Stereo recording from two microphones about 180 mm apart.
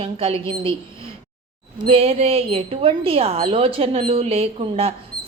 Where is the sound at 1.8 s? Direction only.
35° right (ahead or behind).